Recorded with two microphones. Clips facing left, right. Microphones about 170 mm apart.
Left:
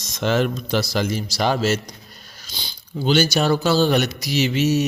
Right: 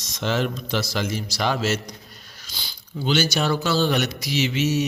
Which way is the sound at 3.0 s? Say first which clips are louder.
Left 4 dB; 40° left (ahead or behind).